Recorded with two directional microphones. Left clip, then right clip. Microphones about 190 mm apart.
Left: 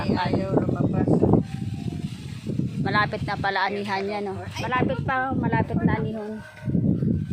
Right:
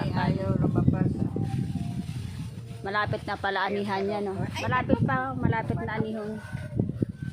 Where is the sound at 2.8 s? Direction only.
5° left (ahead or behind).